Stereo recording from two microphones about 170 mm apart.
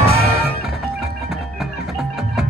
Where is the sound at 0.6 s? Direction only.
Centre (ahead or behind).